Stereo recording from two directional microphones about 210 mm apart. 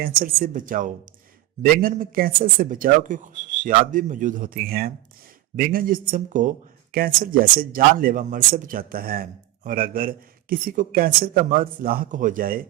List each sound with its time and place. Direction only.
0.0 s a man's voice: 40° right (ahead or behind)